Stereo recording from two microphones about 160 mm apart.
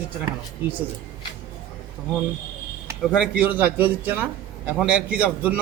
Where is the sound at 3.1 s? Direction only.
5° right (ahead or behind).